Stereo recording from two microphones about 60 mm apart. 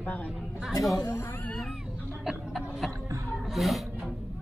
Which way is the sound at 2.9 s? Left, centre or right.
Right.